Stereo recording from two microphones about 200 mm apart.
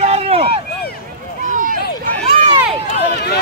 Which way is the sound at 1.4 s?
40° right (ahead or behind).